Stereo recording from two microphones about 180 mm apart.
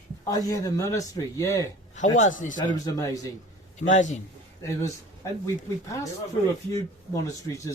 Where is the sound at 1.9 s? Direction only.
45° left (ahead or behind).